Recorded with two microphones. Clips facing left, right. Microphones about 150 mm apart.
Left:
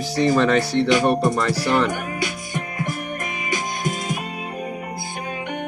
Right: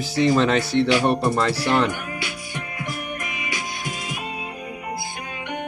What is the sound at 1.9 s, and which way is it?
Music, 45° left (ahead or behind).